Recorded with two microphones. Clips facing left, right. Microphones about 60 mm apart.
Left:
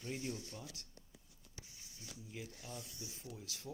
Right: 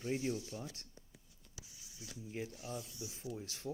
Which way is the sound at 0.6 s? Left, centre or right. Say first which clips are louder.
Right 5 dB; right.